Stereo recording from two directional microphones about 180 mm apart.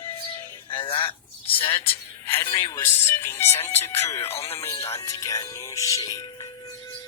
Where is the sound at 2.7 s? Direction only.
15° left (ahead or behind).